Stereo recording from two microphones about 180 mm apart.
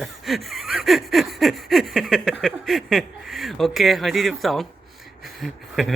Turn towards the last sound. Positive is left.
turn(degrees=0)  # may be behind; listen again after turning